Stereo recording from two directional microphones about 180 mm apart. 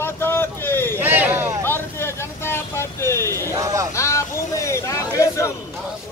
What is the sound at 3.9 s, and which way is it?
Speech, 15° left (ahead or behind).